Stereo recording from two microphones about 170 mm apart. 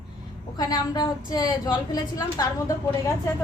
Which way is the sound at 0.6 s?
25° left (ahead or behind).